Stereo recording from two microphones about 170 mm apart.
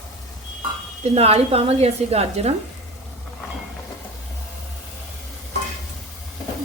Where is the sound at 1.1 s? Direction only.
35° right (ahead or behind).